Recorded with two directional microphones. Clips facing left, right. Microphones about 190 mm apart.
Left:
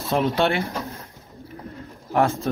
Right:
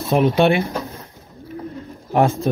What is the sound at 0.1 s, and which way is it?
Speech, 15° right (ahead or behind).